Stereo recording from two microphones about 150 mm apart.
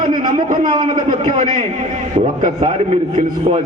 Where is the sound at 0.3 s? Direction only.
60° right (ahead or behind).